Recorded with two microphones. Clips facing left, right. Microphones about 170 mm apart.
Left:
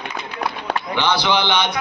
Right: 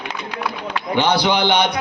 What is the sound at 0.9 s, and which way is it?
Speech, 50° right (ahead or behind).